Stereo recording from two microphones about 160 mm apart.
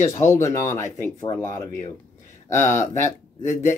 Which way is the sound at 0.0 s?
15° left (ahead or behind).